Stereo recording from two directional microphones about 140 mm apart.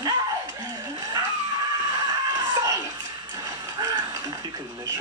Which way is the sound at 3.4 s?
30° right (ahead or behind).